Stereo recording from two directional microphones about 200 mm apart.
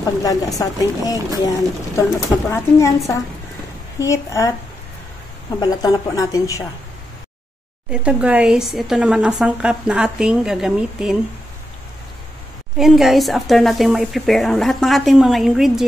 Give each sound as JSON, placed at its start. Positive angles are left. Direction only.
{"t": 0.0, "sound": "speech", "side_deg": 20}
{"t": 4.0, "sound": "speech", "side_deg": 15}
{"t": 5.6, "sound": "speech", "side_deg": 20}
{"t": 7.9, "sound": "speech", "side_deg": -5}
{"t": 12.7, "sound": "speech", "side_deg": 0}